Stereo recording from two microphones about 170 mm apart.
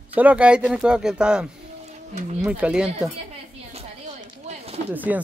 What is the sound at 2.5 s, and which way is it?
Speech, 5° right (ahead or behind).